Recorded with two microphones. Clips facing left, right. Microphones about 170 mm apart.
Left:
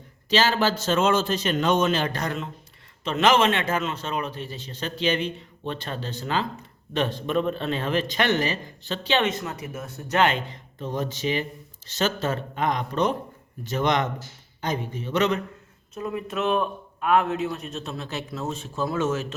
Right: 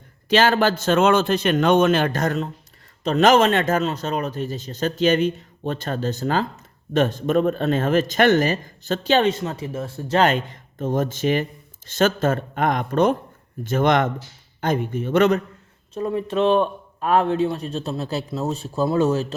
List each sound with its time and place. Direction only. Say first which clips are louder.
0.3 s a man's voice: right 5 dB; 55° right (ahead or behind); by 10.2 s 30° right (ahead or behind)
10.2 s speech: right 4 dB; 50° right (ahead or behind)
16.0 s a man's voice: right 7 dB; 30° right (ahead or behind)